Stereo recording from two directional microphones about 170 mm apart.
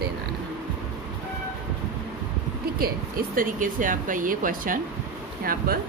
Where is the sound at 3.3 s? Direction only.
55° right (ahead or behind).